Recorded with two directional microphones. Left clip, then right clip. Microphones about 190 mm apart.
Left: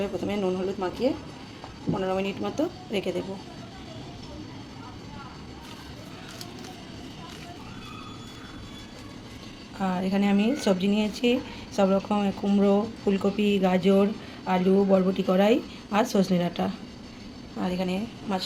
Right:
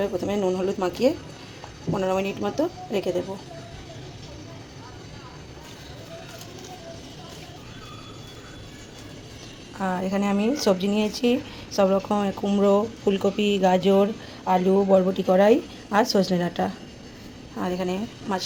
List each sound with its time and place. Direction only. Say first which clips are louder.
0.0 s speech: right 4 dB; 15° right (ahead or behind)
9.7 s speech: right 2 dB; 10° right (ahead or behind)